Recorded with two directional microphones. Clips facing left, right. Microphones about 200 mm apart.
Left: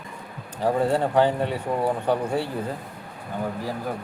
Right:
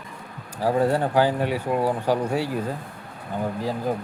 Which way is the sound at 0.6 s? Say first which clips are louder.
Right 1 dB; 5° right (ahead or behind).